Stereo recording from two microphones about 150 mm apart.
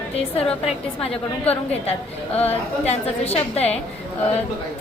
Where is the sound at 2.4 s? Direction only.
45° left (ahead or behind).